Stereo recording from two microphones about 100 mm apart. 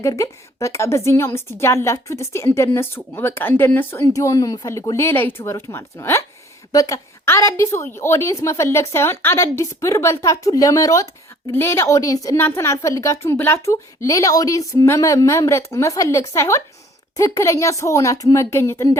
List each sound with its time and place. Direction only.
0.0 s a woman's voice: 30° left (ahead or behind)
4.0 s a woman's voice: 35° left (ahead or behind)
6.7 s a woman's voice: 35° left (ahead or behind)